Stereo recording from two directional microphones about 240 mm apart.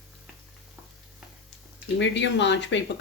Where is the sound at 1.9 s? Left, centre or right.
Left.